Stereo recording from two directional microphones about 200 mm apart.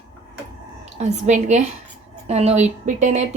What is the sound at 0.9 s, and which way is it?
Speech, 35° right (ahead or behind).